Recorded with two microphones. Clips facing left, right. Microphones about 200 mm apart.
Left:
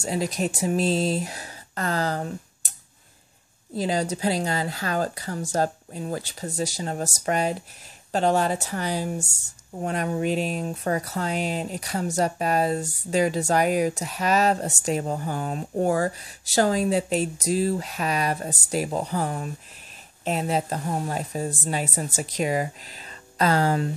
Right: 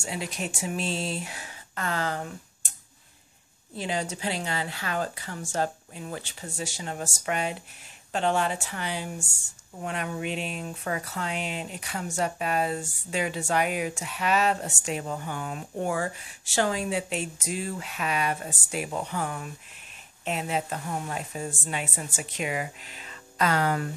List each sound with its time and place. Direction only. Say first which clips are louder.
0.0 s speech: left 7 dB; 40° left (ahead or behind)
3.7 s speech: left 6 dB; 40° left (ahead or behind)